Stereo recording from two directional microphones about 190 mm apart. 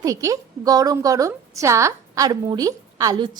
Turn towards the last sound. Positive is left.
turn(degrees=-25)  # may be behind; listen again after turning